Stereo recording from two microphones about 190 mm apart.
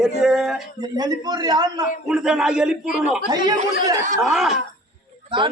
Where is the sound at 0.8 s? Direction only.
20° right (ahead or behind).